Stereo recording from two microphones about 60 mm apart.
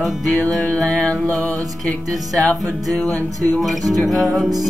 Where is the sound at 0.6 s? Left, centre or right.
Left.